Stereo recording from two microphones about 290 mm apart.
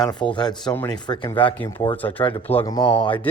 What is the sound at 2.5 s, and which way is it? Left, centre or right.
Speech, centre.